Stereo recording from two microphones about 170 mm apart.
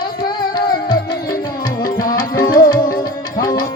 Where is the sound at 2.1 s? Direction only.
60° left (ahead or behind).